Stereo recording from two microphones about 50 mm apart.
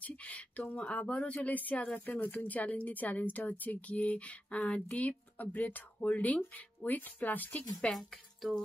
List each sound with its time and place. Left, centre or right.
0.0 s speech: left
2.0 s speech: left
7.9 s speech: centre